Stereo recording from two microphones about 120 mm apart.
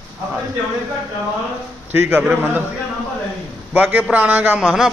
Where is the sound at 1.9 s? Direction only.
15° right (ahead or behind).